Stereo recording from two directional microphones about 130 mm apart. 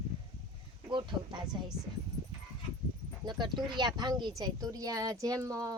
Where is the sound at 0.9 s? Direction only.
35° right (ahead or behind).